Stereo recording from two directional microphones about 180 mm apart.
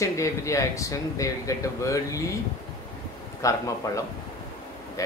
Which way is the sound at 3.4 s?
20° left (ahead or behind).